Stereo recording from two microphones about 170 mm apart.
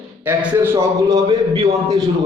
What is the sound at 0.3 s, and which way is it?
A man's voice, 15° right (ahead or behind).